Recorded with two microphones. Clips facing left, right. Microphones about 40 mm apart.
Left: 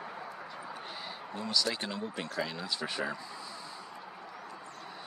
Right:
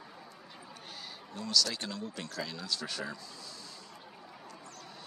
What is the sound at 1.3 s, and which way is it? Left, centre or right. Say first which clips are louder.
Speech: even; left.